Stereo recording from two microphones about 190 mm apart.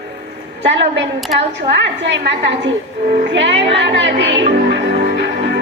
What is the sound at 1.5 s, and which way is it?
A woman's voice, 70° right (ahead or behind).